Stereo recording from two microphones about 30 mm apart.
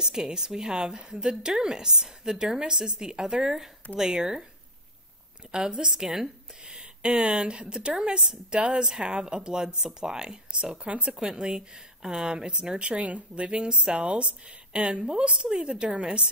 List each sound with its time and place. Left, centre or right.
0.0 s a woman's voice: right
5.8 s a woman's voice: right
6.6 s a woman's voice: right
12.7 s a woman's voice: right